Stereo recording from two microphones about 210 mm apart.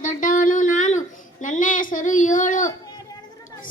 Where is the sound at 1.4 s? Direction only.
40° left (ahead or behind).